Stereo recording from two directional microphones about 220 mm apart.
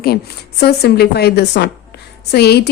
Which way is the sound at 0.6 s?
45° left (ahead or behind).